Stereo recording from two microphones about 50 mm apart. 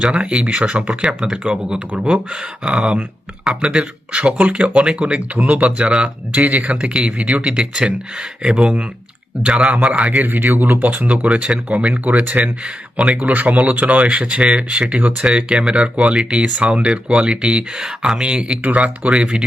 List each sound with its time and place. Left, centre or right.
0.0 s speech: right
4.7 s speech: centre
6.3 s speech: right
7.4 s a man's voice: centre; by 10.7 s right
10.8 s speech: right
11.3 s speech: centre
11.7 s a man's voice: right
12.6 s speech: centre
13.1 s speech: right
18.6 s speech: right
19.1 s speech: centre